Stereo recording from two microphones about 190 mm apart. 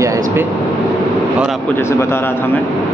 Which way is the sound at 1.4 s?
5° left (ahead or behind).